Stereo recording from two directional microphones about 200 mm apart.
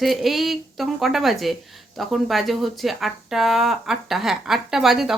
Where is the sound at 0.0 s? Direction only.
Centre (ahead or behind).